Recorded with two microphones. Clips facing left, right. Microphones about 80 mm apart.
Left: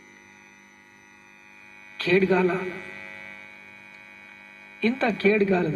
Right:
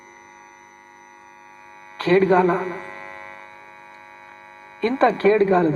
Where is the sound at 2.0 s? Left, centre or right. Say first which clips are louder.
Right 5 dB; right.